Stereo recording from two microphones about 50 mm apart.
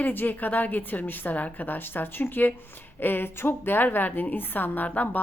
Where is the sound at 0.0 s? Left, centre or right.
Left.